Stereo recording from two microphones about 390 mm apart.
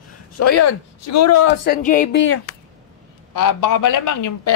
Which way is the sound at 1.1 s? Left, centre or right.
Left.